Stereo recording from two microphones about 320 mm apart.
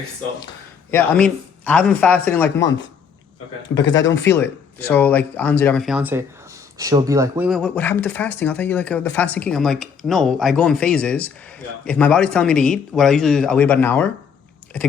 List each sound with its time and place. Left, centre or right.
0.4 s speech: centre
3.8 s speech: left
4.3 s speech: centre